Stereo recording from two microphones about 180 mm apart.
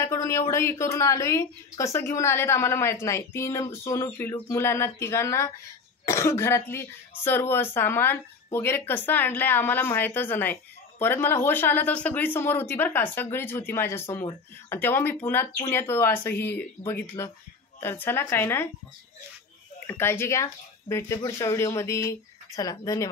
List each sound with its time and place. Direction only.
0.0 s speech: 15° left (ahead or behind)
19.9 s speech: 15° left (ahead or behind)